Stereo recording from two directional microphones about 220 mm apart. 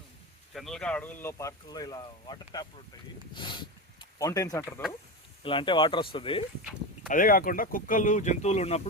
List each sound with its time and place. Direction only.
0.5 s speech: centre (ahead or behind); by 6.4 s 25° left (ahead or behind)
7.1 s speech: 40° left (ahead or behind)